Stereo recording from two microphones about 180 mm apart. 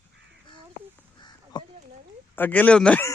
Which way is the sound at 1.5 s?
25° left (ahead or behind).